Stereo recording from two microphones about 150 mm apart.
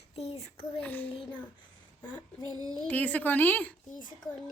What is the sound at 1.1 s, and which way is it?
Speech, 35° left (ahead or behind).